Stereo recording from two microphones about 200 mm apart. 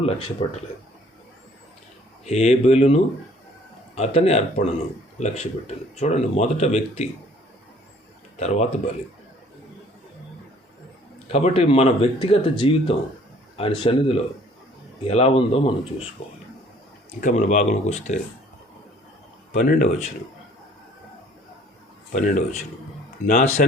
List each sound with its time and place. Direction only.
0.0 s speech: 30° left (ahead or behind)
2.2 s speech: 30° left (ahead or behind)
8.4 s speech: 35° left (ahead or behind)
11.3 s speech: 30° left (ahead or behind)
15.0 s speech: 30° left (ahead or behind)
17.2 s speech: 40° left (ahead or behind)
19.5 s speech: 40° left (ahead or behind)
22.1 s speech: 40° left (ahead or behind)